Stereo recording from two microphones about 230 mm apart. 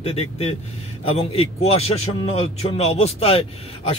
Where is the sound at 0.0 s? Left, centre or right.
Left.